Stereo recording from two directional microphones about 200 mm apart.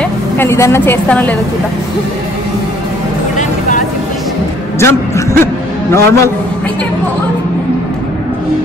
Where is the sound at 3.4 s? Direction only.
35° left (ahead or behind).